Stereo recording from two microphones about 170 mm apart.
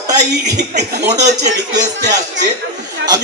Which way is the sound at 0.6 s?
75° right (ahead or behind).